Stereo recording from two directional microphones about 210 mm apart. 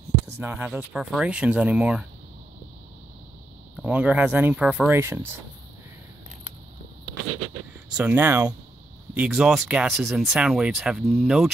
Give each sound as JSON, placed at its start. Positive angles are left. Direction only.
{"t": 0.4, "sound": "speech", "side_deg": -10}
{"t": 3.8, "sound": "speech", "side_deg": -5}
{"t": 7.2, "sound": "a sound", "side_deg": -90}
{"t": 8.0, "sound": "speech", "side_deg": -10}